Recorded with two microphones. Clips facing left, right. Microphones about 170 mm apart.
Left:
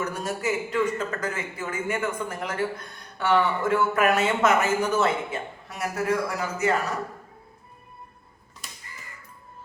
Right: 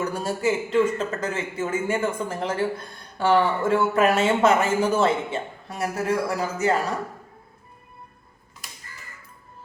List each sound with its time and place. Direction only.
0.0 s a man's voice: 30° right (ahead or behind)